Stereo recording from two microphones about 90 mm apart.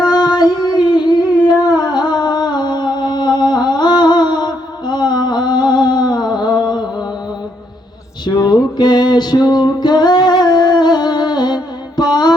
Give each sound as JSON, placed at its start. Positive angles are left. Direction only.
{"t": 0.0, "sound": "music", "side_deg": 50}
{"t": 1.7, "sound": "a sound", "side_deg": 50}
{"t": 8.4, "sound": "music", "side_deg": 45}